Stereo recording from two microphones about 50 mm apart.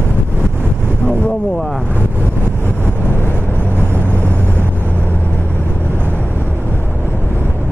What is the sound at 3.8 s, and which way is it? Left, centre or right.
Vehicle, right.